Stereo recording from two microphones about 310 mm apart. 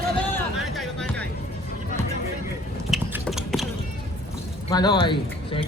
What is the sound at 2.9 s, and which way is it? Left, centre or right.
Clip-clop, centre.